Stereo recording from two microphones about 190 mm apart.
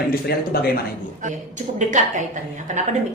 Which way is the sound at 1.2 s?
40° right (ahead or behind).